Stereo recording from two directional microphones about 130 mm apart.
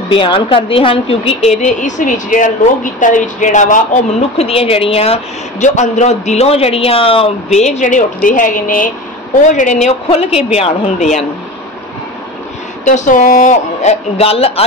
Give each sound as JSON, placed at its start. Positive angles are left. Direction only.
{"t": 0.1, "sound": "a woman's voice", "side_deg": 40}
{"t": 1.6, "sound": "speech", "side_deg": 70}
{"t": 4.4, "sound": "a woman's voice", "side_deg": 50}
{"t": 9.8, "sound": "a woman's voice", "side_deg": 50}
{"t": 12.8, "sound": "speech", "side_deg": 75}